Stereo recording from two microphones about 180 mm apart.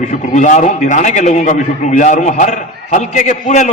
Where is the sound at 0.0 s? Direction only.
45° left (ahead or behind).